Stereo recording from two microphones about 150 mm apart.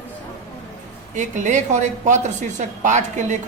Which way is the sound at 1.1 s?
55° right (ahead or behind).